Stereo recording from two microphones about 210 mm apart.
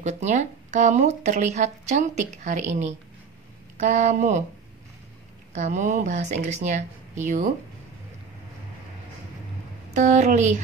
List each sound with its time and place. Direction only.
0.0 s speech: 35° right (ahead or behind)
5.5 s speech: 35° right (ahead or behind)
9.9 s speech: 35° right (ahead or behind)